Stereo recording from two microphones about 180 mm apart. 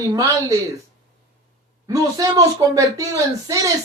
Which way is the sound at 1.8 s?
20° right (ahead or behind).